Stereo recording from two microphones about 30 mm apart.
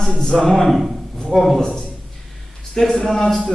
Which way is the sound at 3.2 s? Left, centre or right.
Left.